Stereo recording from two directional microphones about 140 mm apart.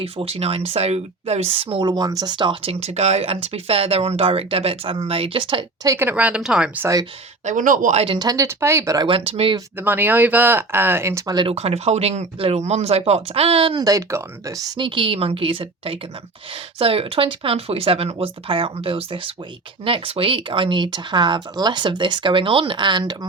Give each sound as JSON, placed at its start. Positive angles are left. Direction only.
{"t": 0.0, "sound": "speech", "side_deg": -45}
{"t": 5.8, "sound": "speech", "side_deg": -20}
{"t": 7.4, "sound": "speech", "side_deg": -70}
{"t": 8.0, "sound": "speech", "side_deg": -30}
{"t": 9.0, "sound": "speech", "side_deg": -40}
{"t": 9.7, "sound": "speech", "side_deg": -15}
{"t": 11.4, "sound": "speech", "side_deg": -45}
{"t": 13.8, "sound": "speech", "side_deg": -20}
{"t": 14.8, "sound": "speech", "side_deg": -40}